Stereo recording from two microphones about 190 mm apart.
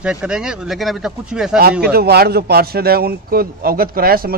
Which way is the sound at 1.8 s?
55° right (ahead or behind).